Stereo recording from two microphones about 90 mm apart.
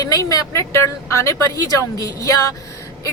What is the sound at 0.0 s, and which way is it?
Speech, 45° left (ahead or behind).